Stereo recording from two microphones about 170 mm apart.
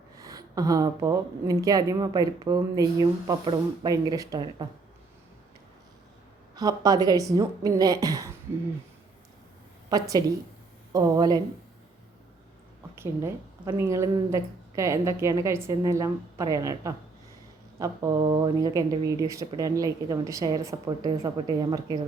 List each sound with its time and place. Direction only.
0.2 s a woman's voice: 20° right (ahead or behind)
6.6 s a woman's voice: 20° right (ahead or behind)
9.9 s a woman's voice: 20° right (ahead or behind)
13.0 s a woman's voice: 15° right (ahead or behind)